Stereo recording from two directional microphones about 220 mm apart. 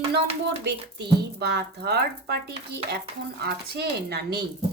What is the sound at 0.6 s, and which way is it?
A woman's voice, 50° right (ahead or behind).